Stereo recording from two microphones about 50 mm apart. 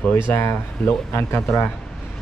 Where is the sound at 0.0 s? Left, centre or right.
Left.